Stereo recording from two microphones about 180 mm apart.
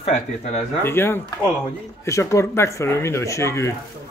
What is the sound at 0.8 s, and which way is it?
Speech, 10° left (ahead or behind).